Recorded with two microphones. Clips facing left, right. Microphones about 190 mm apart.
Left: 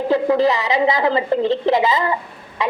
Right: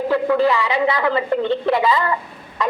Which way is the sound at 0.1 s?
25° left (ahead or behind).